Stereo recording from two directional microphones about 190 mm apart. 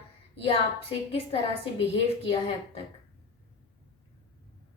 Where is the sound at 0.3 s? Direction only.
30° left (ahead or behind).